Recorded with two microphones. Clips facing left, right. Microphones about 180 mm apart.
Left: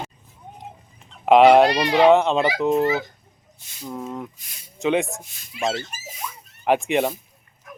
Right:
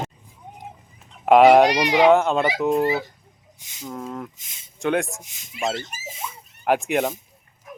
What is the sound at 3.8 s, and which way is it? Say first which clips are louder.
Speech: left 1 dB; 5° left (ahead or behind).